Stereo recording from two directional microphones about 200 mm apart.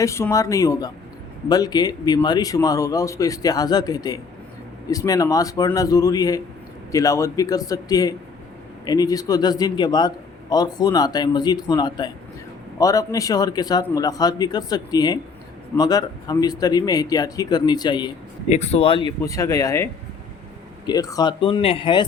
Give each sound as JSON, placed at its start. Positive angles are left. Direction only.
{"t": 0.0, "sound": "a man's voice", "side_deg": 15}
{"t": 18.4, "sound": "a man's voice", "side_deg": 35}